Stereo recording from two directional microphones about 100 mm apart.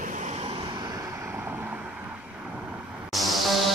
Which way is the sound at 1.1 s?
25° right (ahead or behind).